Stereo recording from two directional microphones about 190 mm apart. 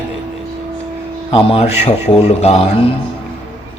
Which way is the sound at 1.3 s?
30° left (ahead or behind).